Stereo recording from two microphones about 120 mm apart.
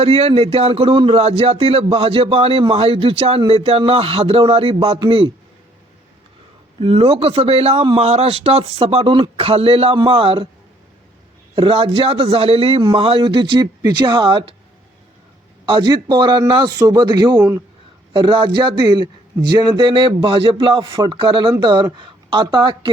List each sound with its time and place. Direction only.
0.0 s speech: 60° right (ahead or behind)
6.7 s speech: 55° right (ahead or behind)
11.5 s a man's voice: 45° right (ahead or behind)
15.6 s a man's voice: 40° right (ahead or behind)